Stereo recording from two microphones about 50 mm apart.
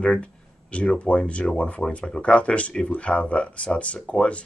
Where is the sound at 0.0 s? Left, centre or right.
Left.